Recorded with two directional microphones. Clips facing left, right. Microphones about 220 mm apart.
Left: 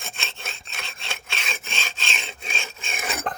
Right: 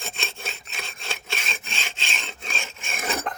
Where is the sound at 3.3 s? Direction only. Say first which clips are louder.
Left 2 dB; 30° left (ahead or behind).